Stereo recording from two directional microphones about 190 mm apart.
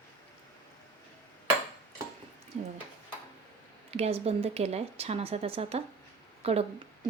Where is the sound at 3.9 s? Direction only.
30° right (ahead or behind).